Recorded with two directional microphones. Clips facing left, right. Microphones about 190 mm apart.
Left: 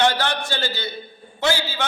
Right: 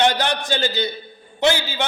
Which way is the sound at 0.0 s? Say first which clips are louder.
Right 1 dB; 15° right (ahead or behind).